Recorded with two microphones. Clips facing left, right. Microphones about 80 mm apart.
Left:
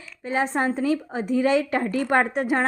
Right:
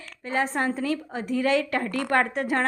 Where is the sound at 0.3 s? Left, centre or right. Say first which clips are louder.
Left 2 dB; centre.